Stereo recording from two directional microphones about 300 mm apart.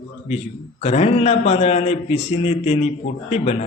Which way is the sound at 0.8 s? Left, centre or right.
Left.